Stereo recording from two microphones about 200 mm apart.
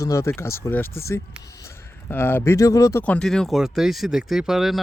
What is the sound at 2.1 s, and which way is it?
Speech, 10° left (ahead or behind).